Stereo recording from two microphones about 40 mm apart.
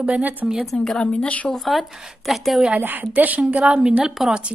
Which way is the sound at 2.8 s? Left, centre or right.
Right.